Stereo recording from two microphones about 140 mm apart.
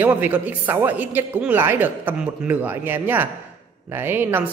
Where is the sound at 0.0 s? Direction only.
15° right (ahead or behind).